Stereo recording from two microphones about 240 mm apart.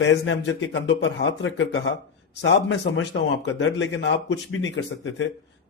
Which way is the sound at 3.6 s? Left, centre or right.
Left.